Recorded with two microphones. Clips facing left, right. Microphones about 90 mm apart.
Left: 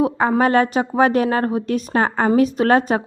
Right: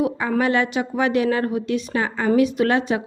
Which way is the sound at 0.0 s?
40° left (ahead or behind).